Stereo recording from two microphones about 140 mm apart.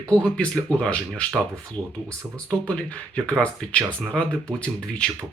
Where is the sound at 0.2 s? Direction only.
5° left (ahead or behind).